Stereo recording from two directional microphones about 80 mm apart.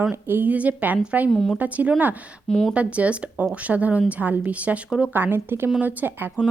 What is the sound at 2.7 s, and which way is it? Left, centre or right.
A woman's voice, centre.